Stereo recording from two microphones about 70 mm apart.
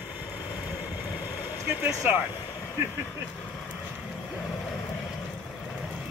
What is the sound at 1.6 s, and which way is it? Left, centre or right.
Speech, right.